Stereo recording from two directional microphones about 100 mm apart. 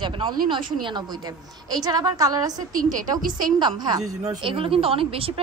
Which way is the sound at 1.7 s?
40° right (ahead or behind).